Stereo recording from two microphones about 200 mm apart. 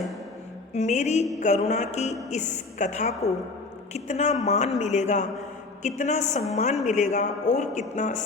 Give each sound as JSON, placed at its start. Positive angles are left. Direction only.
{"t": 0.7, "sound": "a man's voice", "side_deg": 35}